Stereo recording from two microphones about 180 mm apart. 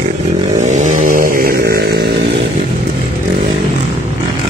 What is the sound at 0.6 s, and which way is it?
Chainsaw, 45° right (ahead or behind).